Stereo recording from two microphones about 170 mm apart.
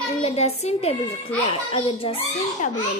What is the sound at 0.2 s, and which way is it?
A woman's voice, 40° left (ahead or behind).